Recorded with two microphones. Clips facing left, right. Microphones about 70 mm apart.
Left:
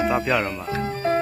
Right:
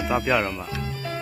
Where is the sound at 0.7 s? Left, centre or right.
Left.